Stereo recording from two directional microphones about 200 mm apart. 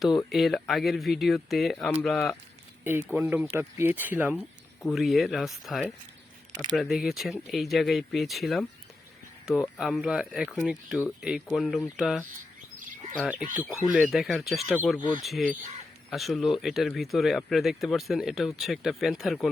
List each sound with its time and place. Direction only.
0.3 s speech: centre (ahead or behind)
3.2 s speech: 10° right (ahead or behind)
13.6 s speech: 15° left (ahead or behind)
13.9 s speech: centre (ahead or behind)